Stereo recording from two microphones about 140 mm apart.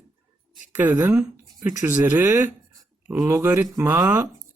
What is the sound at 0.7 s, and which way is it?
Speech, 10° right (ahead or behind).